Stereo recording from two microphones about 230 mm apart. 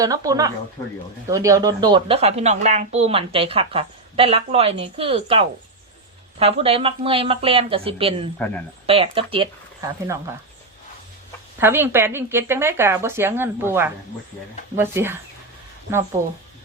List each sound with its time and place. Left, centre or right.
0.0 s a woman's voice: centre
11.6 s speech: centre